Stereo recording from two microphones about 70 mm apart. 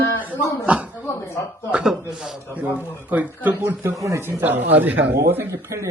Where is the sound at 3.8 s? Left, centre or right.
Right.